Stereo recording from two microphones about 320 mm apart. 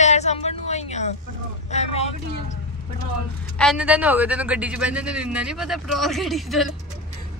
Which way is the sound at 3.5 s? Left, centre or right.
Centre.